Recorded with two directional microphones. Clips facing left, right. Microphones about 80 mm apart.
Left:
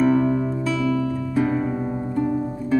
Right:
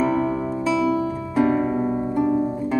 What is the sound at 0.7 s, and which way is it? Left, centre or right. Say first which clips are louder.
Music: right 1 dB; right.